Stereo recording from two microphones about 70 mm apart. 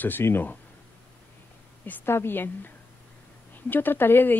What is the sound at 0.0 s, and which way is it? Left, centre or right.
Speech, left.